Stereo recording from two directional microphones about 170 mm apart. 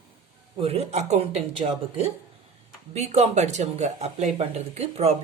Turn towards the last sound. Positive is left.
turn(degrees=-35)  # may be behind; listen again after turning